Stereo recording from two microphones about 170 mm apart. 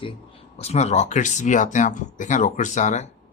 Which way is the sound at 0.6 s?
40° left (ahead or behind).